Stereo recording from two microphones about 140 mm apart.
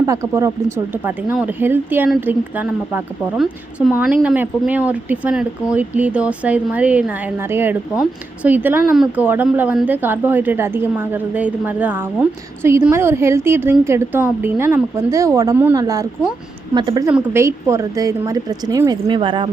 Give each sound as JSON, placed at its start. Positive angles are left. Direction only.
{"t": 0.0, "sound": "a woman's voice", "side_deg": -20}
{"t": 3.3, "sound": "a woman's voice", "side_deg": 0}
{"t": 17.1, "sound": "a woman's voice", "side_deg": -15}